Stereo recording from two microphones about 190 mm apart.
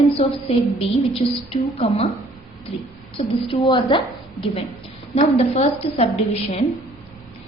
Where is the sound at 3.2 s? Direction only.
30° left (ahead or behind).